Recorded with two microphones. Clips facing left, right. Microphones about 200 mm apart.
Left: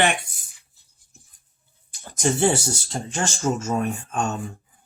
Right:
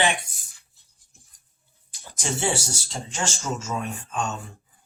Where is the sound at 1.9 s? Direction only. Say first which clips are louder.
Left 7 dB; 55° left (ahead or behind).